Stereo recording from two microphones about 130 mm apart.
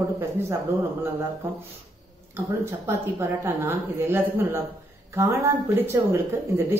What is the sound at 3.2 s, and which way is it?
Speech, 15° right (ahead or behind).